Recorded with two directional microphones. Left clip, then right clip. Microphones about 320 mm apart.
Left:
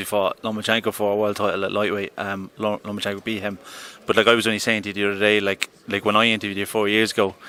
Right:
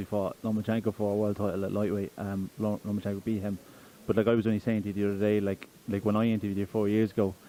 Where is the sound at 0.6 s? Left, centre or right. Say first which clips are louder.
Left 11 dB; centre.